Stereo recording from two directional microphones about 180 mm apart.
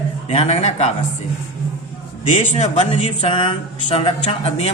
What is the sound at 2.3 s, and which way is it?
Speech, 35° left (ahead or behind).